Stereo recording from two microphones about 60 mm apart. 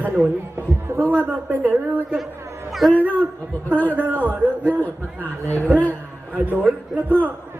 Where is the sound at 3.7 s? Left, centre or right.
Left.